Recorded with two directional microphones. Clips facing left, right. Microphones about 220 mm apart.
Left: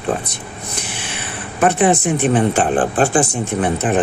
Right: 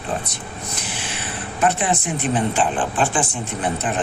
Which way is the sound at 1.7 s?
50° left (ahead or behind).